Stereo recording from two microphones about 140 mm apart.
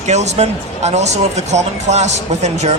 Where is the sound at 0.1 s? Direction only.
55° right (ahead or behind).